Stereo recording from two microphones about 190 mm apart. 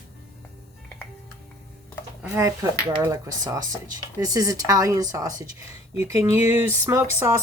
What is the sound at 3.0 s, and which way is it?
Speech, 15° right (ahead or behind).